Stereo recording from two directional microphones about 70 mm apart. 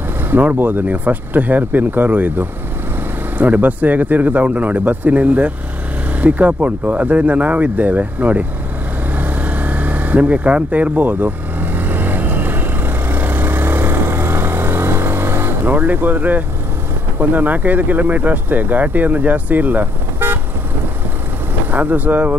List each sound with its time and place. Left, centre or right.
0.3 s speech: right
9.2 s vehicle: right
17.2 s speech: right
21.6 s speech: right